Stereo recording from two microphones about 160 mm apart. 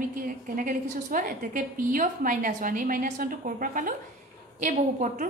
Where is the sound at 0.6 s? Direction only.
60° right (ahead or behind).